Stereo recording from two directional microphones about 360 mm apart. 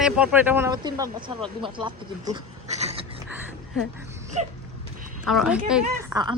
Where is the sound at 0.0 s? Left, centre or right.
Centre.